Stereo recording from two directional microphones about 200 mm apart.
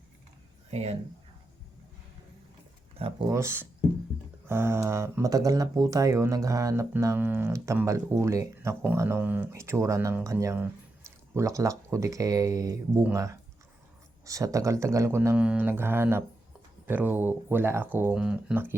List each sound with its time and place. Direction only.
0.7 s speech: 35° right (ahead or behind)
2.9 s speech: 25° right (ahead or behind)
3.2 s speech: 15° right (ahead or behind)